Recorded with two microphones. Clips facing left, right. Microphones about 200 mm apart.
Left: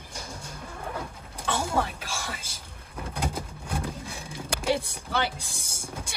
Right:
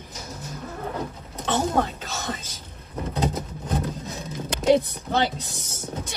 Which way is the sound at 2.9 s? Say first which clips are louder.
Right 6 dB; 10° left (ahead or behind).